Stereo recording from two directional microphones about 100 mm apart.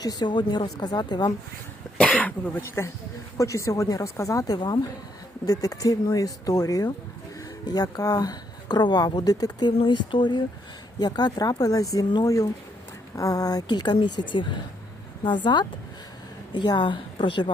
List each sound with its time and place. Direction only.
0.0 s a woman's voice: 45° left (ahead or behind)
2.0 s speech: 10° left (ahead or behind)
3.3 s speech: 30° left (ahead or behind)
9.8 s a woman's voice: 55° left (ahead or behind)